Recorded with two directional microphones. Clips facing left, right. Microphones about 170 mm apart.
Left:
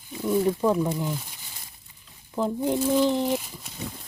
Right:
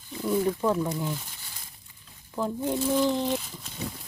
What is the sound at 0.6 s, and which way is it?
Speech, 10° left (ahead or behind).